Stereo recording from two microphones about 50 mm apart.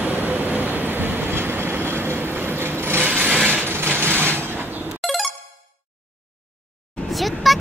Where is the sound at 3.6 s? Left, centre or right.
Right.